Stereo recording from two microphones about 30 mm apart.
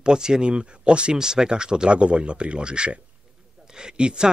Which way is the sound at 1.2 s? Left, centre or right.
Right.